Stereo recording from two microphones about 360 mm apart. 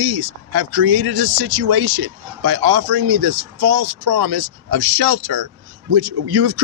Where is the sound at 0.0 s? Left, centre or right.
Right.